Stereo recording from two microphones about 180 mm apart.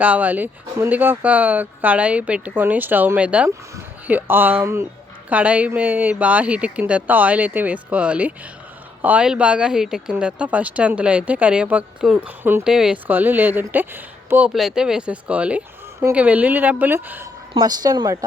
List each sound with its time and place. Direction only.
0.0 s speech: 10° right (ahead or behind)
17.5 s speech: 20° right (ahead or behind)